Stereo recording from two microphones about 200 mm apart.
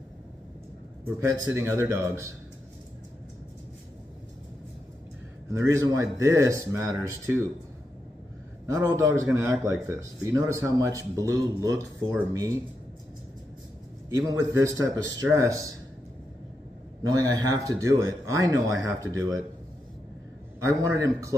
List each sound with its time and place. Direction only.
1.0 s a man's voice: 15° right (ahead or behind)
5.5 s a man's voice: 15° right (ahead or behind)
8.6 s a man's voice: 15° right (ahead or behind)
14.1 s a man's voice: 15° right (ahead or behind)
17.0 s a man's voice: 20° right (ahead or behind)
20.6 s a man's voice: 15° right (ahead or behind)